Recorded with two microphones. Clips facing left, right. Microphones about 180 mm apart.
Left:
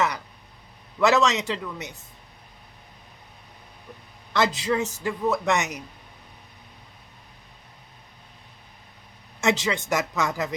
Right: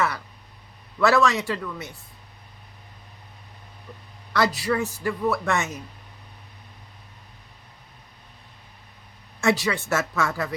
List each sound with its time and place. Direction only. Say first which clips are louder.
0.9 s speech: even; 20° left (ahead or behind)
4.3 s speech: even; 20° left (ahead or behind)
9.4 s speech: right 1 dB; 20° left (ahead or behind)